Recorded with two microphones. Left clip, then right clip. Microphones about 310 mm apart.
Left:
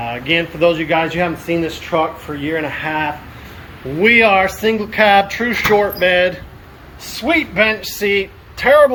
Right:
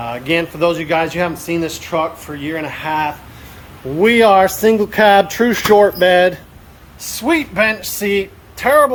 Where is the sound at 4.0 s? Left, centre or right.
Centre.